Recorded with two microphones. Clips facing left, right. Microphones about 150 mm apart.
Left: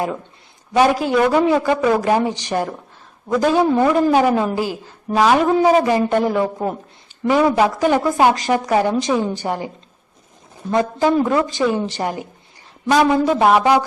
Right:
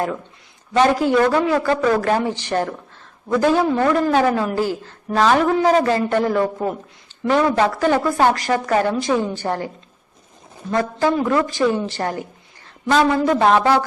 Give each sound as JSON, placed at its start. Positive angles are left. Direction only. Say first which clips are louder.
{"t": 0.7, "sound": "a woman's voice", "louder": "even", "side_deg": 15}